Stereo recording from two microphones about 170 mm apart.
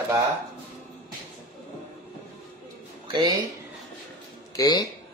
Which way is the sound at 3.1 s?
20° right (ahead or behind).